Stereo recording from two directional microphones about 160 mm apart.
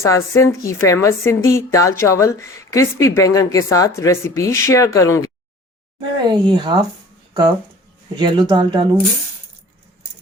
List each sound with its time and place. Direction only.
0.0 s a woman's voice: 20° left (ahead or behind)
6.0 s speech: 30° right (ahead or behind)
8.1 s speech: 30° right (ahead or behind)